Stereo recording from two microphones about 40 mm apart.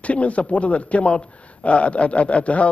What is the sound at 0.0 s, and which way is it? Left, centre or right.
A man's voice, left.